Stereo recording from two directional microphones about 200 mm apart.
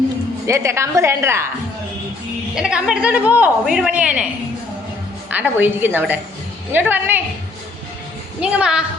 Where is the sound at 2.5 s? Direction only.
5° right (ahead or behind).